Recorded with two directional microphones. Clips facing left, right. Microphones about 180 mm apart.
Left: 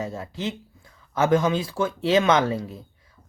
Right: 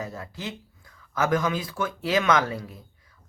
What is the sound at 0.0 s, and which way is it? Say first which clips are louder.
Speech: left 5 dB; 25° left (ahead or behind).